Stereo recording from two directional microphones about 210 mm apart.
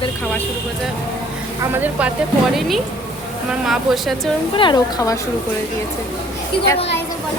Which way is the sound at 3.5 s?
Centre (ahead or behind).